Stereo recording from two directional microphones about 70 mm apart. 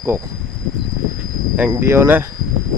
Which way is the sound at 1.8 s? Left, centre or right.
Right.